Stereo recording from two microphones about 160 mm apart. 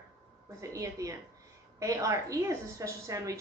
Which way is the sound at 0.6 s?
20° right (ahead or behind).